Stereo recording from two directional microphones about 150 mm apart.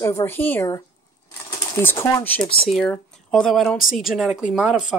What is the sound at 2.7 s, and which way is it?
Speech, 5° left (ahead or behind).